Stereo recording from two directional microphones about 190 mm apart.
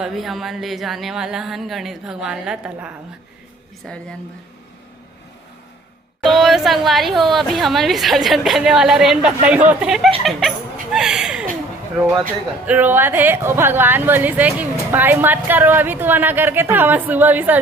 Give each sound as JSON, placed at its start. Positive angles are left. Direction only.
{"t": 0.0, "sound": "a woman's voice", "side_deg": 0}
{"t": 6.2, "sound": "a woman's voice", "side_deg": 0}
{"t": 12.6, "sound": "a woman's voice", "side_deg": -10}